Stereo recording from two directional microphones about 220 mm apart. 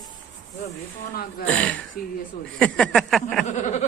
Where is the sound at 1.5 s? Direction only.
5° left (ahead or behind).